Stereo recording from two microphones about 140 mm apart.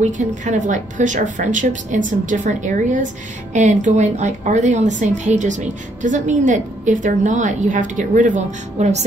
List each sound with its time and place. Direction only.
0.0 s a woman's voice: 60° right (ahead or behind)